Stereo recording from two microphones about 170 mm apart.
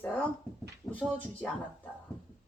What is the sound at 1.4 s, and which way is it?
Speech, 5° left (ahead or behind).